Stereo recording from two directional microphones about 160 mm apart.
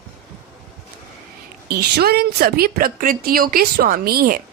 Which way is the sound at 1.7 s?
85° right.